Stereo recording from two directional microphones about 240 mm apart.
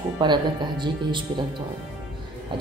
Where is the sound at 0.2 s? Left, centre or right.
Centre.